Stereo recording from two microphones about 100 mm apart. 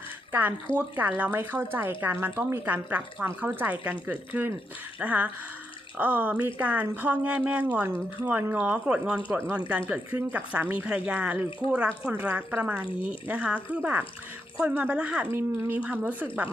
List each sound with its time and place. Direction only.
0.8 s a woman's voice: 20° right (ahead or behind)
15.3 s a woman's voice: 25° right (ahead or behind)